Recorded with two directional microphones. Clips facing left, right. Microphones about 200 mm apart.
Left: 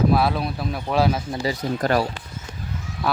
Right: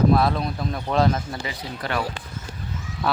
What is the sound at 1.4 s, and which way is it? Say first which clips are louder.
Speech: left 8 dB; 35° left (ahead or behind).